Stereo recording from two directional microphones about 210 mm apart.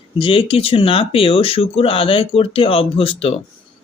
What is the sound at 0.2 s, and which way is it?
Speech, 25° left (ahead or behind).